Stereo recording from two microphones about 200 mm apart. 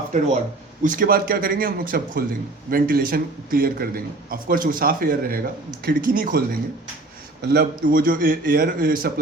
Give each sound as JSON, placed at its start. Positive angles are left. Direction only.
{"t": 0.8, "sound": "a man's voice", "side_deg": -45}